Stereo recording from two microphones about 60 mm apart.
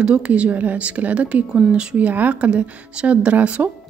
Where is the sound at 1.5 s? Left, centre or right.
Centre.